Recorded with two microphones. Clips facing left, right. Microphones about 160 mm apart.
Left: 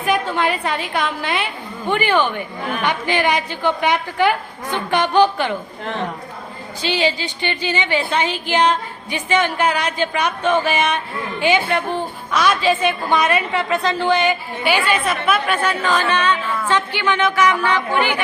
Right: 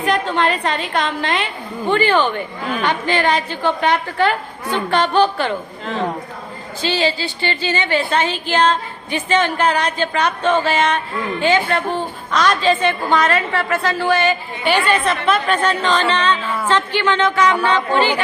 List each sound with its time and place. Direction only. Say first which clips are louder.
0.0 s a woman's voice: right 1 dB; 10° left (ahead or behind)
6.8 s a woman's voice: right 1 dB; 15° left (ahead or behind)